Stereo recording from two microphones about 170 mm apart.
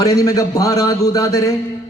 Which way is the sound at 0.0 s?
20° left (ahead or behind).